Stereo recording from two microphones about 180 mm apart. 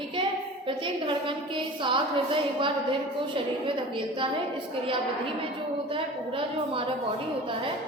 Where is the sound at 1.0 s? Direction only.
30° right (ahead or behind).